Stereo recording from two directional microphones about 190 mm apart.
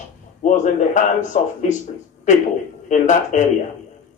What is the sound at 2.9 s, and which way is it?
Speech, 40° left (ahead or behind).